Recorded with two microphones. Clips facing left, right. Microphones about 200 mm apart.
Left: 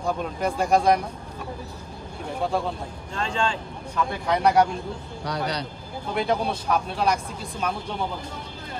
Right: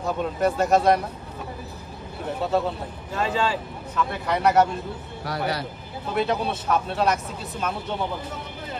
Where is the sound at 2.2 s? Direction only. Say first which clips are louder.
Right 2 dB; 5° right (ahead or behind).